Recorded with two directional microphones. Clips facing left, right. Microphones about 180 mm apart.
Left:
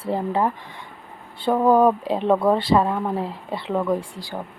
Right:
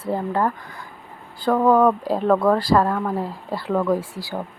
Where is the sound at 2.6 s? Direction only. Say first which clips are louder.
Right 1 dB; 25° left (ahead or behind).